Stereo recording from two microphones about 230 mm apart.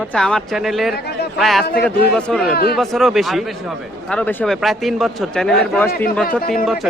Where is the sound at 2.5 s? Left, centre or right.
Left.